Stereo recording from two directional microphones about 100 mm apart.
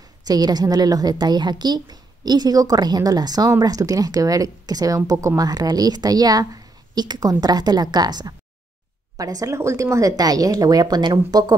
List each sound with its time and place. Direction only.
0.2 s a woman's voice: 40° right (ahead or behind)